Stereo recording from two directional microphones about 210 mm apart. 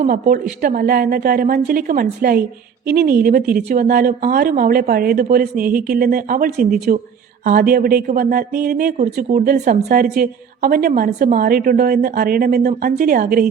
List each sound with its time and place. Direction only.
0.0 s speech: 40° right (ahead or behind)